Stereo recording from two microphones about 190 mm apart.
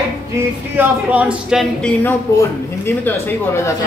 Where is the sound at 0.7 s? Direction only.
5° right (ahead or behind).